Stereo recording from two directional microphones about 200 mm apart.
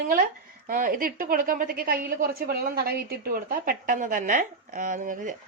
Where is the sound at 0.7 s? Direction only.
45° right (ahead or behind).